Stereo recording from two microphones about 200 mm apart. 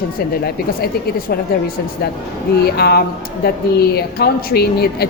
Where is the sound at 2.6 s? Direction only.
55° left (ahead or behind).